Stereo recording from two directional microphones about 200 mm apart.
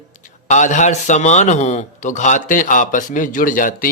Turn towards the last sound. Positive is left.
turn(degrees=45)  # may be behind; listen again after turning